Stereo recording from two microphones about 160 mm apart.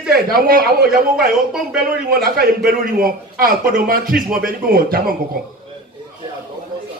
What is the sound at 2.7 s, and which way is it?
A man's voice, 65° right (ahead or behind).